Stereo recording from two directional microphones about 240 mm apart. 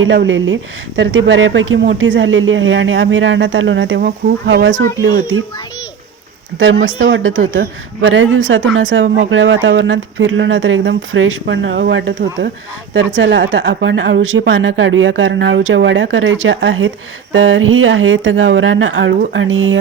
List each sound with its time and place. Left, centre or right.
0.0 s speech: right
7.0 s speech: right